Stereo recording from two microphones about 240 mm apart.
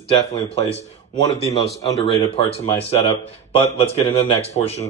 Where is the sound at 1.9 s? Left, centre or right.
Left.